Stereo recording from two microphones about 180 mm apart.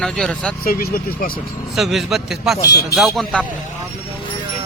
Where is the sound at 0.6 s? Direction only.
55° left (ahead or behind).